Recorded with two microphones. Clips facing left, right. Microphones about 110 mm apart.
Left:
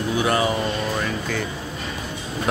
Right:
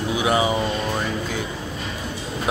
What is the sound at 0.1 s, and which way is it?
Speech, 10° right (ahead or behind).